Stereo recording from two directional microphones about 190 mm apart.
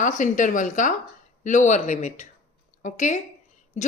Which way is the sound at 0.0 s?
40° left (ahead or behind).